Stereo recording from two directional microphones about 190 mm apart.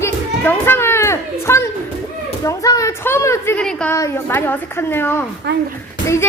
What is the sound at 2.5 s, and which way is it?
A woman's voice, 15° left (ahead or behind).